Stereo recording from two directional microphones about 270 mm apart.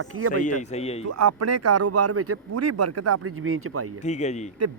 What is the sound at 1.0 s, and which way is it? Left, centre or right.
Speech, right.